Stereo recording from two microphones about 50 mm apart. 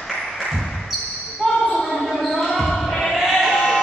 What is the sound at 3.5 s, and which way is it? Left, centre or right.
Music, centre.